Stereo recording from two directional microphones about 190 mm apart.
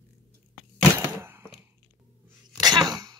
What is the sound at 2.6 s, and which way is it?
Cough, 20° right (ahead or behind).